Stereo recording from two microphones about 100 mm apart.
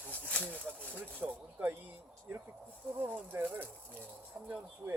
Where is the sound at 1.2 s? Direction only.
15° right (ahead or behind).